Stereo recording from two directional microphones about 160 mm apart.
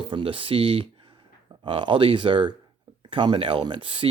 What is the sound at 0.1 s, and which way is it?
Speech, 35° right (ahead or behind).